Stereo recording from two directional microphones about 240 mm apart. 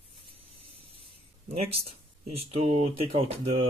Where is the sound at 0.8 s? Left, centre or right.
Right.